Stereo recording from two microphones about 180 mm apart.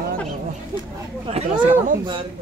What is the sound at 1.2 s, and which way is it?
Speech, 30° right (ahead or behind).